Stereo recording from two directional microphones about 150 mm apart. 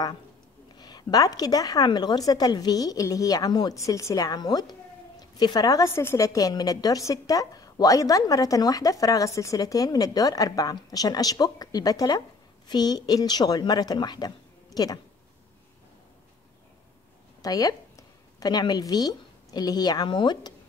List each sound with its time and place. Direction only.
0.7 s a woman's voice: 25° left (ahead or behind)
17.4 s a woman's voice: 25° left (ahead or behind)